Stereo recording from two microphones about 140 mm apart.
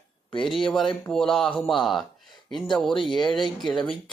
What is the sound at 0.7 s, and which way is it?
A man's voice, centre (ahead or behind).